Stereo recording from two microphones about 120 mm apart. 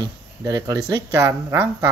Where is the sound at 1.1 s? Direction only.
20° right (ahead or behind).